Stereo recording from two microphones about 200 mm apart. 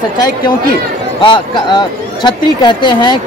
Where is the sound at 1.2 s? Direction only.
25° left (ahead or behind).